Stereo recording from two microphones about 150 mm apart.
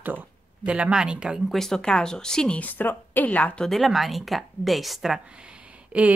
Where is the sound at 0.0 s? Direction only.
10° right (ahead or behind).